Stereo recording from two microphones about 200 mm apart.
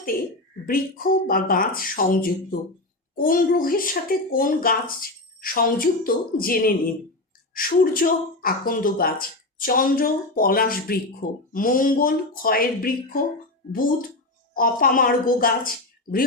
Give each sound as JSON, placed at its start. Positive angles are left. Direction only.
{"t": 0.6, "sound": "speech", "side_deg": 45}
{"t": 14.5, "sound": "speech", "side_deg": 45}